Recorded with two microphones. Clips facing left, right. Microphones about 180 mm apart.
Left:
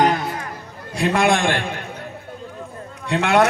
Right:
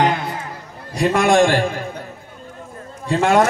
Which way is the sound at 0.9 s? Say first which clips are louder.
Right 3 dB; 60° left (ahead or behind).